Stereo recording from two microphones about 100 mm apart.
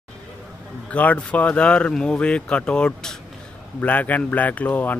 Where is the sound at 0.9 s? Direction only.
15° left (ahead or behind).